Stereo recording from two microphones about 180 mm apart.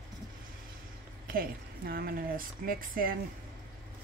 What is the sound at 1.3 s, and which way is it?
Speech, 55° right (ahead or behind).